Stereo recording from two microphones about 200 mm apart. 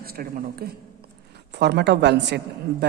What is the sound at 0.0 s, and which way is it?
Speech, 50° right (ahead or behind).